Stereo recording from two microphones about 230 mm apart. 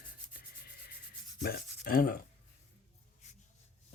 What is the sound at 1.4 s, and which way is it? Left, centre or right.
Speech, left.